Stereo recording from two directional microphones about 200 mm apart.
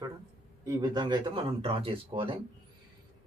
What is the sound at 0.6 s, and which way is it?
Speech, 20° right (ahead or behind).